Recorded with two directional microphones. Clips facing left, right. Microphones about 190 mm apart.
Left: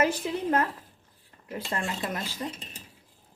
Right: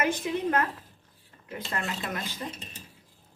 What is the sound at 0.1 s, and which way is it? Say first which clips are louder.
Speech: even; 35° left (ahead or behind).